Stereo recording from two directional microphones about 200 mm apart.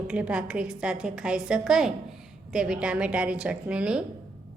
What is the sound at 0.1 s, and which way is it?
A woman's voice, 5° right (ahead or behind).